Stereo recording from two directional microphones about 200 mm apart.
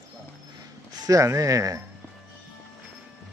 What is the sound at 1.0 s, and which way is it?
Speech, 15° right (ahead or behind).